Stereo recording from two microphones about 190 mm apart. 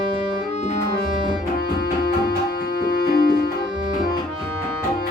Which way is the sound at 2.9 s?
55° left (ahead or behind).